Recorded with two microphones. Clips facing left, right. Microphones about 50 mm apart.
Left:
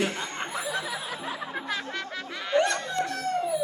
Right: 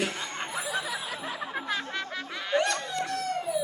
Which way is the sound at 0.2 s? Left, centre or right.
Left.